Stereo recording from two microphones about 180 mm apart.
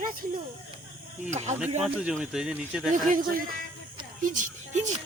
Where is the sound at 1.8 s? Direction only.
5° right (ahead or behind).